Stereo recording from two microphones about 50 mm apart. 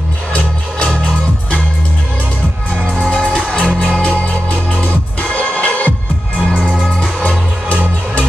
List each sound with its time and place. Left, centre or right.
3.4 s music: centre
7.0 s music: left